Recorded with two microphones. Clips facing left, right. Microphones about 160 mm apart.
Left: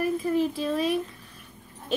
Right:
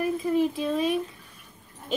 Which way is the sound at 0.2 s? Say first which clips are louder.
Right 1 dB; 15° right (ahead or behind).